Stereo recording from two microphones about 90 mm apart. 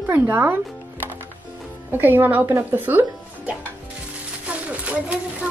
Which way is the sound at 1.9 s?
20° right (ahead or behind).